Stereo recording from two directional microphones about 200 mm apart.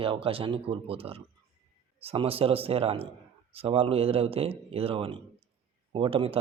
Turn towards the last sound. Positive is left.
turn(degrees=-25)  # may be behind; listen again after turning